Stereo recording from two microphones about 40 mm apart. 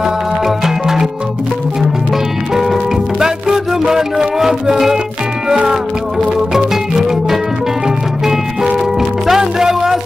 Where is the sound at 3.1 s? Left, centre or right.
Centre.